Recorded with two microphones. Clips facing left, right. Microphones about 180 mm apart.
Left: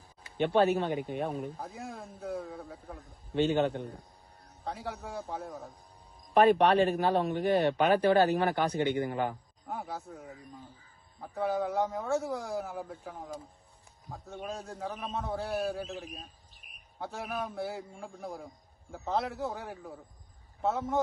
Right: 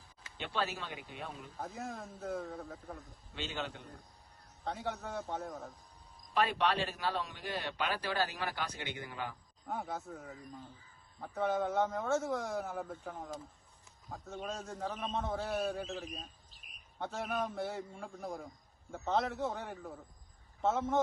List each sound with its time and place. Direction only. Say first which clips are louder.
0.3 s a man's voice: left 12 dB; 55° left (ahead or behind)
1.5 s a man's voice: left 1 dB; centre (ahead or behind)
3.3 s a man's voice: left 14 dB; 55° left (ahead or behind)
4.6 s a man's voice: left 1 dB; 5° left (ahead or behind)
6.3 s a man's voice: left 9 dB; 55° left (ahead or behind)
9.6 s a man's voice: left 1 dB; centre (ahead or behind)
16.5 s bird: left 2 dB; 55° left (ahead or behind)
17.0 s a man's voice: even; centre (ahead or behind)